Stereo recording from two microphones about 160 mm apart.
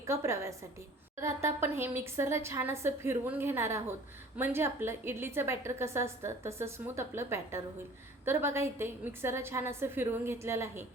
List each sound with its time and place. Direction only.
0.0 s a woman's voice: 15° right (ahead or behind)